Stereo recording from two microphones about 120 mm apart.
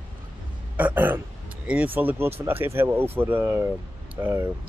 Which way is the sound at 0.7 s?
15° right (ahead or behind).